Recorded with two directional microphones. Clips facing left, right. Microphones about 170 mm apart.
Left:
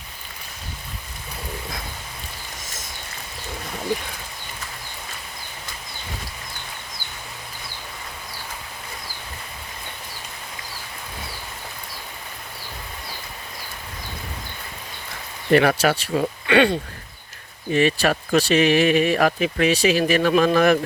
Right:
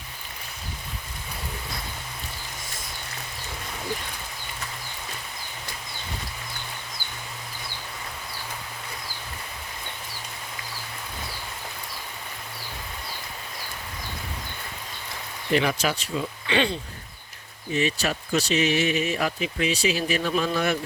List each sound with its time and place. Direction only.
15.5 s speech: 60° left (ahead or behind)